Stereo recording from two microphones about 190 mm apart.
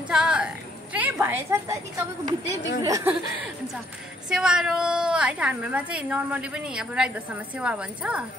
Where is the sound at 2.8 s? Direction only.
15° right (ahead or behind).